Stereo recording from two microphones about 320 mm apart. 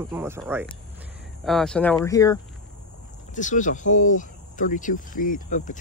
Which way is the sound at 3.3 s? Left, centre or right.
Left.